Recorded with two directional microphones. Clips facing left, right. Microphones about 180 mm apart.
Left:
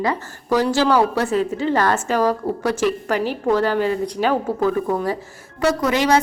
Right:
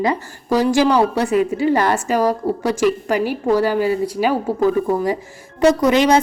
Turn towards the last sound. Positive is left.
turn(degrees=-20)  # may be behind; listen again after turning